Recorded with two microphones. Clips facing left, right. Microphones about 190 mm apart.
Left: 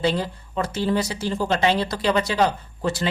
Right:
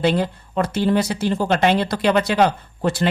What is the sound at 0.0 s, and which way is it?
Speech, 60° right (ahead or behind).